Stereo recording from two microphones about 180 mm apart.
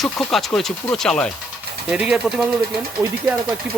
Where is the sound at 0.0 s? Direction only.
Centre (ahead or behind).